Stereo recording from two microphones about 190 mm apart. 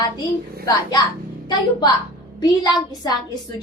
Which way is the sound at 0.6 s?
20° left (ahead or behind).